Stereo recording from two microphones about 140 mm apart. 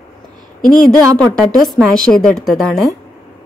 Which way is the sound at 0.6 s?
Centre (ahead or behind).